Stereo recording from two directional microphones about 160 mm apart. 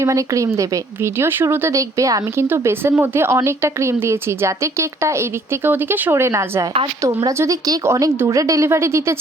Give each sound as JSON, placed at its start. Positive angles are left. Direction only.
{"t": 0.0, "sound": "a woman's voice", "side_deg": -20}